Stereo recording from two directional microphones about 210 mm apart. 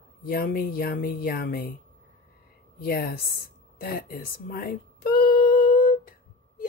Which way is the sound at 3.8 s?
45° left (ahead or behind).